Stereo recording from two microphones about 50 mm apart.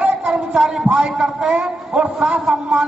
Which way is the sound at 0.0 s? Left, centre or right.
Right.